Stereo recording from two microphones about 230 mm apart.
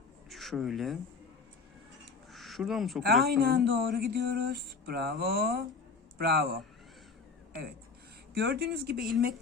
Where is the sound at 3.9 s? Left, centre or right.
Right.